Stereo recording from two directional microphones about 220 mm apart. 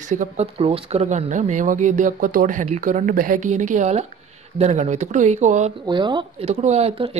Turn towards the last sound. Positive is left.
turn(degrees=-25)  # may be behind; listen again after turning